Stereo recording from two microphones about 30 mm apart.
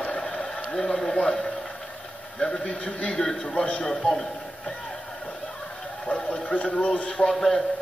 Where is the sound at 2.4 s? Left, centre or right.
Left.